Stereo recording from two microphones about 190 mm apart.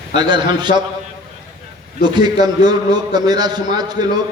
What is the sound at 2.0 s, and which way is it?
A man's voice, 20° right (ahead or behind).